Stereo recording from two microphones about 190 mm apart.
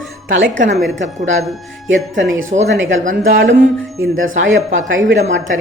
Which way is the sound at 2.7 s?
75° right (ahead or behind).